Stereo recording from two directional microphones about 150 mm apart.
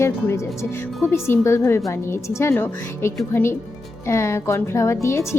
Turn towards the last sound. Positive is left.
turn(degrees=20)  # may be behind; listen again after turning